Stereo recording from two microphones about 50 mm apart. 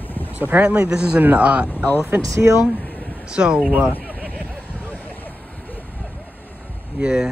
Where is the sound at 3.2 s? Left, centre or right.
Centre.